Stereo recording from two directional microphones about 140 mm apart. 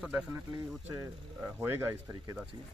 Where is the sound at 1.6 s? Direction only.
15° right (ahead or behind).